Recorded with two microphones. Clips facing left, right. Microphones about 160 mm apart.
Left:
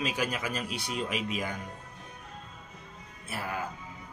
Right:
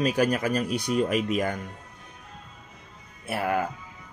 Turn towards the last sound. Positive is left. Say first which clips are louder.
# right 10 dB
turn(degrees=-65)  # may be behind; listen again after turning